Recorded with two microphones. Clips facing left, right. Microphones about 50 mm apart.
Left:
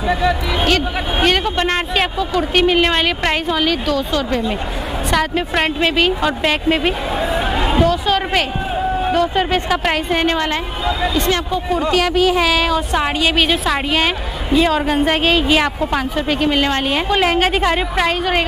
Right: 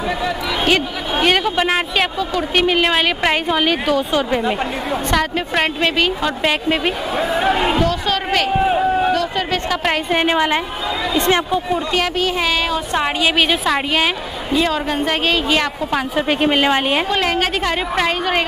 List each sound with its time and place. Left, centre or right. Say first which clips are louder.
0.1 s a woman's voice: left 8 dB; centre
0.7 s a woman's voice: right 1 dB; centre
3.4 s a woman's voice: right 1 dB; centre
5.1 s a woman's voice: left 2 dB; centre
8.5 s a sound: right 4 dB; right
9.1 s a woman's voice: left 3 dB; centre
10.1 s a woman's voice: right 1 dB; centre
11.1 s speech: right 2 dB; right
11.7 s a woman's voice: left 6 dB; centre
16.2 s a woman's voice: right 2 dB; centre
17.1 s a woman's voice: left 3 dB; centre